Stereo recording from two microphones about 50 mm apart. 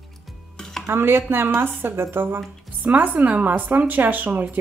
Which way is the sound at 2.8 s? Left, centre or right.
Right.